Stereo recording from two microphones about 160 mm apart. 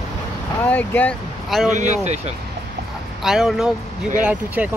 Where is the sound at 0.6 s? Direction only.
10° left (ahead or behind).